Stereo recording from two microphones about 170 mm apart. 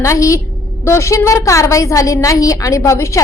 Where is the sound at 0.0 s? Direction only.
20° left (ahead or behind).